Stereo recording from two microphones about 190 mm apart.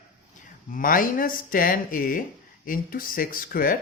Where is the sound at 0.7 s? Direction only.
45° left (ahead or behind).